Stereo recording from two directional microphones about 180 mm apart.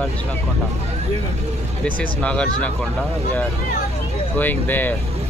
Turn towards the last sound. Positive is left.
turn(degrees=10)  # may be behind; listen again after turning